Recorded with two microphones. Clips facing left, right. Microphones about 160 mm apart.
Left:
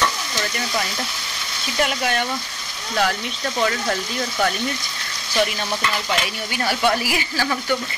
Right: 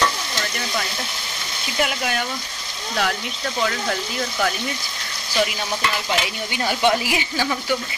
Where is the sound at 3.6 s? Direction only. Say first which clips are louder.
Left 2 dB; centre (ahead or behind).